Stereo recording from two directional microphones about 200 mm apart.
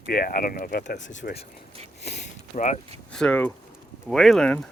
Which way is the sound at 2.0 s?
35° left (ahead or behind).